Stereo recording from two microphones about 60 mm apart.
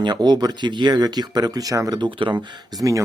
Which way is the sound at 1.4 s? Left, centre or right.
Right.